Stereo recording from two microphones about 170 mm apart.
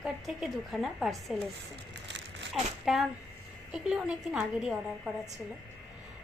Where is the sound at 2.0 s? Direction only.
90° right.